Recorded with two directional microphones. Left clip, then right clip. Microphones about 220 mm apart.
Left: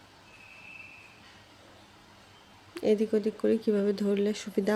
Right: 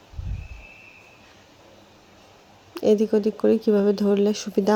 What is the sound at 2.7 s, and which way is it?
Speech, 15° right (ahead or behind).